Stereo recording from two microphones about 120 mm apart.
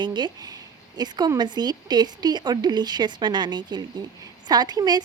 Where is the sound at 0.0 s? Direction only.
40° right (ahead or behind).